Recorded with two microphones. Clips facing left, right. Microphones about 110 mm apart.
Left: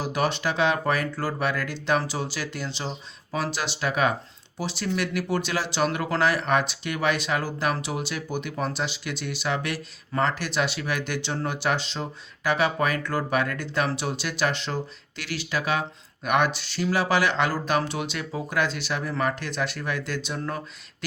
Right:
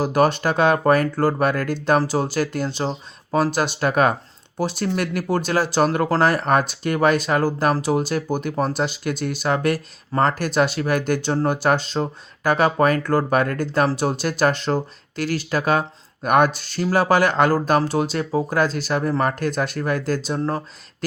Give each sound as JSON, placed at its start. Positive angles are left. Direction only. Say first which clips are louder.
{"t": 0.0, "sound": "speech", "louder": "right 7 dB", "side_deg": -45}